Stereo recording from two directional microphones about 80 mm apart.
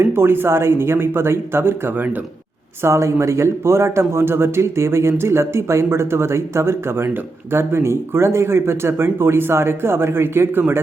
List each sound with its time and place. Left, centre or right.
0.0 s speech: right